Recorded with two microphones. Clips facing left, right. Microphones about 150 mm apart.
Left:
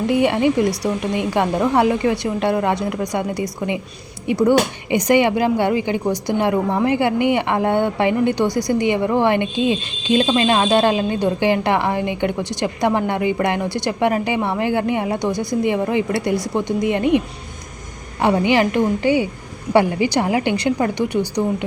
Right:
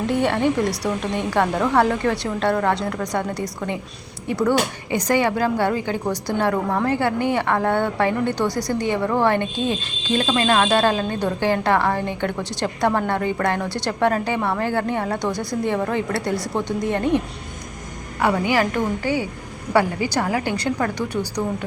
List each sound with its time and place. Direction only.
0.1 s a woman's voice: 10° left (ahead or behind)